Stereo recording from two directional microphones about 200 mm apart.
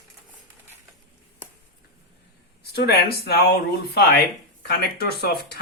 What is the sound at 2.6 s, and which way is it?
Speech, 55° left (ahead or behind).